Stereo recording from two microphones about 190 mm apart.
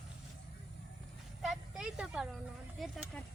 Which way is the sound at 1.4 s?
5° right (ahead or behind).